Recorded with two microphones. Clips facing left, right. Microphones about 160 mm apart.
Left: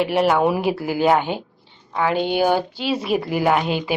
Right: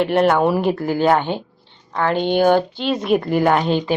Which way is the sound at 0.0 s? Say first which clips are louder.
Right 2 dB; 5° left (ahead or behind).